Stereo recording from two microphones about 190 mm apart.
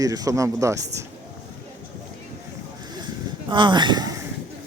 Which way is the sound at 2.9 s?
25° right (ahead or behind).